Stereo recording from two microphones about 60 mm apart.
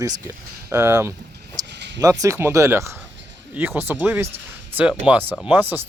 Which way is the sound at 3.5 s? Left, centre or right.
Right.